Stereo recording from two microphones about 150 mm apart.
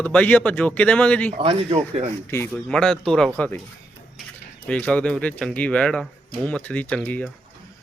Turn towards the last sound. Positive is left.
turn(degrees=10)  # may be behind; listen again after turning